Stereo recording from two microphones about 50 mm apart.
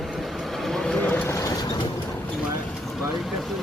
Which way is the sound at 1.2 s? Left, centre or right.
Left.